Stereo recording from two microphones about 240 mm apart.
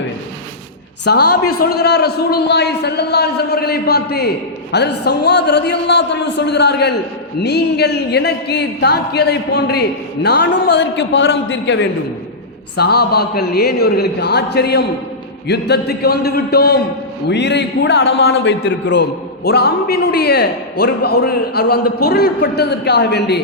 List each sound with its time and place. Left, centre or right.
1.0 s a man's voice: left